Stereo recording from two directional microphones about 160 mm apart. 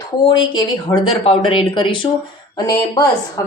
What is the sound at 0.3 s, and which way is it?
A woman's voice, 30° left (ahead or behind).